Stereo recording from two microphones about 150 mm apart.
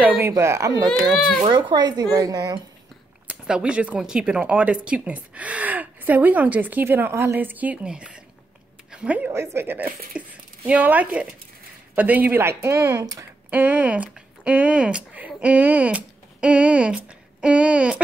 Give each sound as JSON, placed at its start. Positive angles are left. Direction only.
{"t": 0.2, "sound": "speech", "side_deg": -20}
{"t": 3.3, "sound": "speech", "side_deg": -5}
{"t": 13.5, "sound": "speech", "side_deg": -10}